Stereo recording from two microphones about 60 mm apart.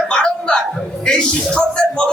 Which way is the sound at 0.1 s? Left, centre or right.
Centre.